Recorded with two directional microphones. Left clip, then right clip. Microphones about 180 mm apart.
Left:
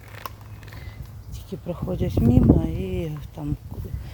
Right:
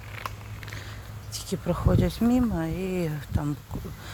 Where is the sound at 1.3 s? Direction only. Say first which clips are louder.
Right 3 dB; 5° left (ahead or behind); by 3.0 s 25° left (ahead or behind).